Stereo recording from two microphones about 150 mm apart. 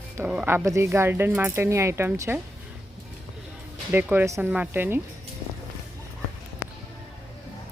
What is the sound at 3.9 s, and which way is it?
Speech, 15° right (ahead or behind).